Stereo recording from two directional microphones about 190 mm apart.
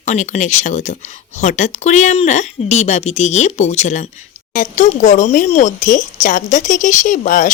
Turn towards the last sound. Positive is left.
turn(degrees=40)  # may be behind; listen again after turning